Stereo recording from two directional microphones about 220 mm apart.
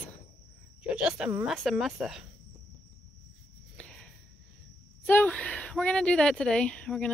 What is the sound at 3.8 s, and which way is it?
Cricket, 5° left (ahead or behind).